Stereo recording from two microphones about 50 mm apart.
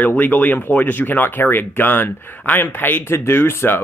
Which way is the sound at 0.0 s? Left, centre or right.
Left.